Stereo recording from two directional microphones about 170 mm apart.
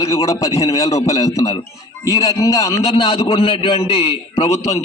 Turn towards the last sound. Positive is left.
turn(degrees=20)  # may be behind; listen again after turning